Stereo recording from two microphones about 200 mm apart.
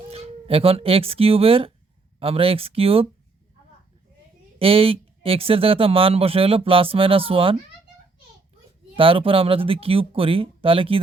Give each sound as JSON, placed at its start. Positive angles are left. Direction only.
{"t": 0.1, "sound": "speech", "side_deg": -30}
{"t": 4.6, "sound": "speech", "side_deg": -30}
{"t": 9.0, "sound": "speech", "side_deg": -25}